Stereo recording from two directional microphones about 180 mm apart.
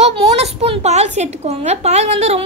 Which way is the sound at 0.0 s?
35° right (ahead or behind).